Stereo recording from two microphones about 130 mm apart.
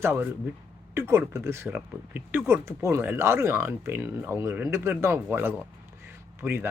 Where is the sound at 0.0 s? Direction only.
15° right (ahead or behind).